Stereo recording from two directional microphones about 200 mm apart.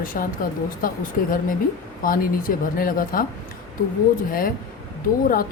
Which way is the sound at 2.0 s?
45° left (ahead or behind).